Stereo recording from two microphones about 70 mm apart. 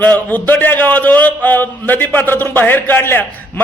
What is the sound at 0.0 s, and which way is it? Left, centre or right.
A man's voice, left.